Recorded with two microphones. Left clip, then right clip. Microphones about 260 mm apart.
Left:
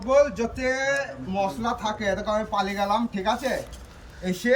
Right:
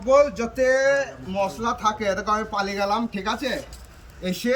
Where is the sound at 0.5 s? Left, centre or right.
Right.